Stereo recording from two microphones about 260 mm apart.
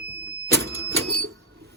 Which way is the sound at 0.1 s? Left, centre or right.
Right.